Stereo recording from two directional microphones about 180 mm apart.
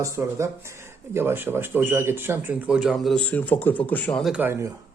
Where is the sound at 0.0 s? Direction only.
15° right (ahead or behind).